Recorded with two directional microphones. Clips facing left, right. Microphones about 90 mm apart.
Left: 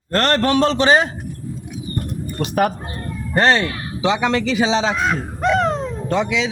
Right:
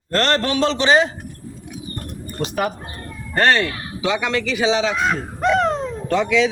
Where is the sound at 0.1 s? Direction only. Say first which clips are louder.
Left 2 dB; 45° left (ahead or behind).